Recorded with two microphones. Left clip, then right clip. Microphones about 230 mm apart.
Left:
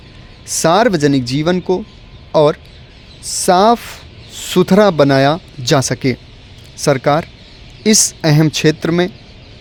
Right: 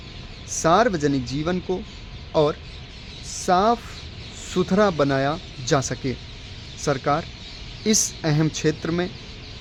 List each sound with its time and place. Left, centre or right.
0.5 s speech: left